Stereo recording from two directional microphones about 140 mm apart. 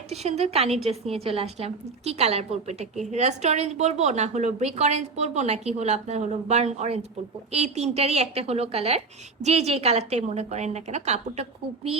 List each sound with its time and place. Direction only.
0.1 s a woman's voice: 50° right (ahead or behind)